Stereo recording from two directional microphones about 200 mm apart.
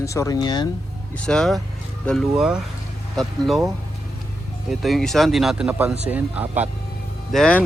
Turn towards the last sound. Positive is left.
turn(degrees=5)  # may be behind; listen again after turning